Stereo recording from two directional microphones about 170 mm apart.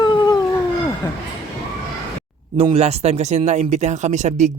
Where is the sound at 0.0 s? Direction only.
25° left (ahead or behind).